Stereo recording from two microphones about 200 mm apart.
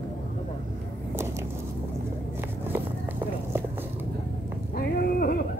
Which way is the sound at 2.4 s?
10° right (ahead or behind).